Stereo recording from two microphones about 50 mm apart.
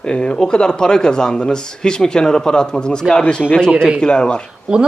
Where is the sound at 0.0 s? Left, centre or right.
Centre.